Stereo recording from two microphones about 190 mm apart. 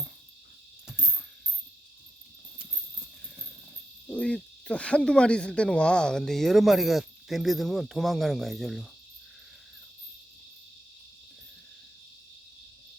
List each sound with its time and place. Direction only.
4.1 s hoot: 5° left (ahead or behind)